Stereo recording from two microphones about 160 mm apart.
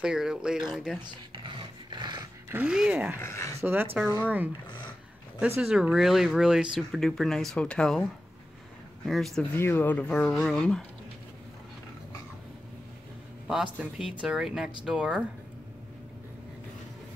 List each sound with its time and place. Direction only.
0.0 s speech: 5° right (ahead or behind)
1.3 s dog: 30° right (ahead or behind)
2.5 s speech: 5° right (ahead or behind)
3.2 s speech: 15° left (ahead or behind)
3.6 s speech: 15° right (ahead or behind)
5.6 s speech: 5° right (ahead or behind)
9.0 s speech: centre (ahead or behind)
9.6 s speech: 10° left (ahead or behind)
13.7 s speech: 5° right (ahead or behind)